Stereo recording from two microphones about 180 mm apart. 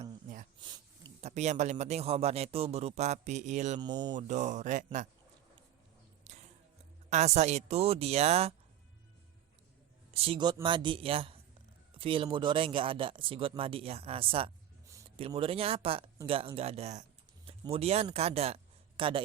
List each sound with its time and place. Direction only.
0.6 s a sound: 25° right (ahead or behind)
1.2 s a man's voice: 40° right (ahead or behind)
3.8 s speech: 25° right (ahead or behind)
4.1 s a man's voice: 40° right (ahead or behind)
6.3 s a sound: 40° right (ahead or behind)
7.1 s a man's voice: 35° right (ahead or behind)
10.2 s a man's voice: 30° right (ahead or behind)